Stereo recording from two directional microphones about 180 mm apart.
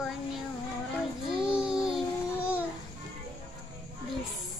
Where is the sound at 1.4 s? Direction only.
5° right (ahead or behind).